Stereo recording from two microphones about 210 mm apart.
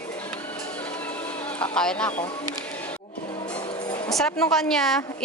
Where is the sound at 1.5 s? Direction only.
5° left (ahead or behind).